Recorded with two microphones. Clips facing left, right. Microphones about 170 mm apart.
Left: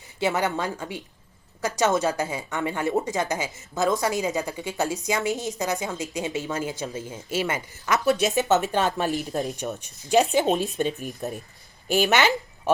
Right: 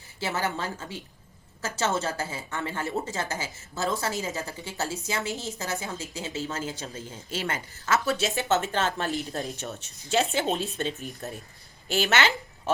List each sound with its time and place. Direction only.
0.2 s a woman's voice: 20° left (ahead or behind)
1.6 s a woman's voice: 15° left (ahead or behind)